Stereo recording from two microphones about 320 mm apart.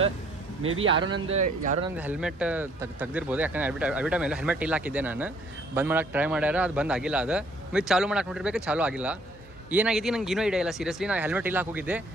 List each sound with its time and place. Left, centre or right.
0.6 s a man's voice: right
0.8 s speech: centre
2.0 s a man's voice: centre